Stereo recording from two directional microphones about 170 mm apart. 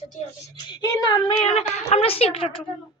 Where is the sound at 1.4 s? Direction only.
40° left (ahead or behind).